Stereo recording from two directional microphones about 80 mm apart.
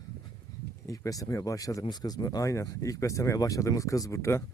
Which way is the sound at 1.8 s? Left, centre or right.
Left.